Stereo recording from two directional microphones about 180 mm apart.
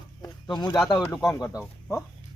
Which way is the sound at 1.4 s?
Centre (ahead or behind).